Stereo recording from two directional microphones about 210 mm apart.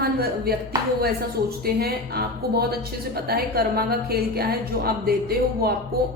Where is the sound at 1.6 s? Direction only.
45° right (ahead or behind).